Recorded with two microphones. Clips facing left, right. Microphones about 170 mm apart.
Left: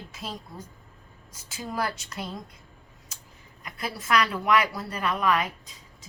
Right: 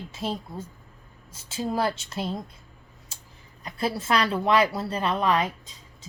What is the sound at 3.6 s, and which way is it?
A woman's voice, 30° right (ahead or behind).